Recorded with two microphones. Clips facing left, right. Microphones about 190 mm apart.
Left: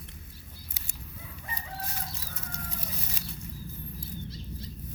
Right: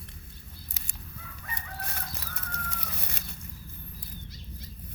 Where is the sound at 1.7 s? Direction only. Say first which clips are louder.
Left 1 dB; 60° right (ahead or behind).